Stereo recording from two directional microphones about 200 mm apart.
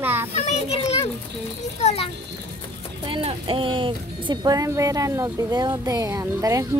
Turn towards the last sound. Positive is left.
turn(degrees=-15)  # may be behind; listen again after turning